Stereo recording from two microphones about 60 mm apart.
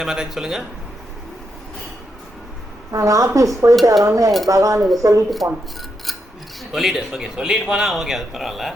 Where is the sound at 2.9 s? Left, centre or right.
Right.